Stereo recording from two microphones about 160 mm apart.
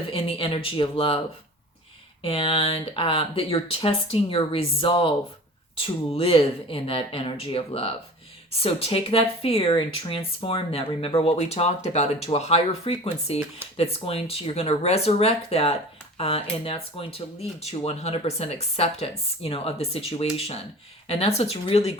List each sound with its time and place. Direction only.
0.1 s speech: 35° left (ahead or behind)
2.2 s speech: 35° left (ahead or behind)